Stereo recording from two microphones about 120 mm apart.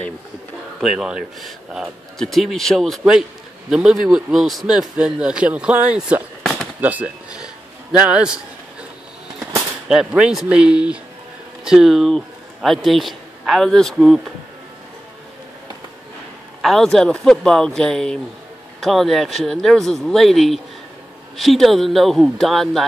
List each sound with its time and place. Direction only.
0.7 s a man's voice: centre (ahead or behind)
9.8 s a man's voice: 5° right (ahead or behind)
16.6 s a man's voice: centre (ahead or behind)